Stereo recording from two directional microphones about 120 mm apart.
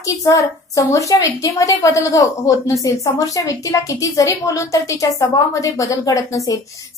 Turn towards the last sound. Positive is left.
turn(degrees=30)  # may be behind; listen again after turning